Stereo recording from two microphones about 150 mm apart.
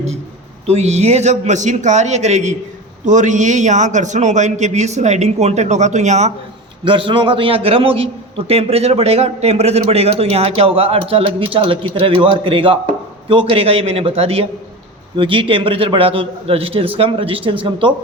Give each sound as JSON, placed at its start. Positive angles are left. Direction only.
{"t": 0.7, "sound": "a man's voice", "side_deg": -45}
{"t": 6.8, "sound": "a man's voice", "side_deg": -35}